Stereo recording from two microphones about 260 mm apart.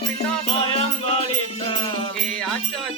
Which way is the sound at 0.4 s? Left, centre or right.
Left.